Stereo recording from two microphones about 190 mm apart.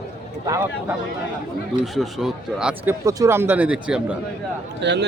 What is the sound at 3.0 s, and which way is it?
A man's voice, 15° right (ahead or behind).